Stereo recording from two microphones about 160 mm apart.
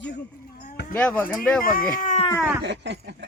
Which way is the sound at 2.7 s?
90° right.